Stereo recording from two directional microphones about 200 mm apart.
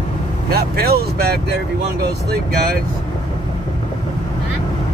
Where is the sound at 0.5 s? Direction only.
50° right (ahead or behind).